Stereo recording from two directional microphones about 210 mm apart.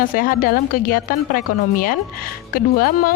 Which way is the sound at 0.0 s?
40° left (ahead or behind).